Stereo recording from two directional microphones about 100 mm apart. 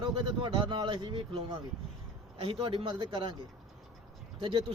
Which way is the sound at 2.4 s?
65° right (ahead or behind).